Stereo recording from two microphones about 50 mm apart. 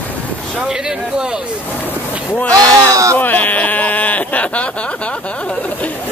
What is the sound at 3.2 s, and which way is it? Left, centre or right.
Speech, left.